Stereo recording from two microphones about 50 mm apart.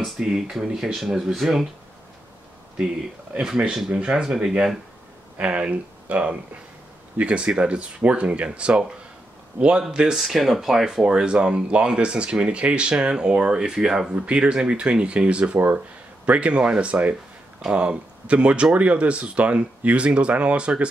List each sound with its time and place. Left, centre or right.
0.2 s speech: centre
3.3 s speech: centre
14.1 s speech: right